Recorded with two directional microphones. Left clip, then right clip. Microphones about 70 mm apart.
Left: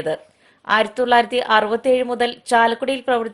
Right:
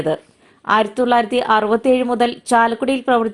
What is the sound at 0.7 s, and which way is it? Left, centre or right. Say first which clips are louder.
A woman's voice: right 1 dB; centre.